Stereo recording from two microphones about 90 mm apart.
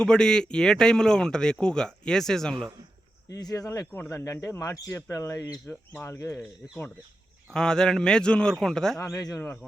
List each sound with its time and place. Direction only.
0.0 s a man's voice: 10° left (ahead or behind)
3.3 s speech: 40° left (ahead or behind)
5.6 s a man's voice: 15° left (ahead or behind)
6.1 s speech: 35° left (ahead or behind)
7.5 s a man's voice: 10° left (ahead or behind)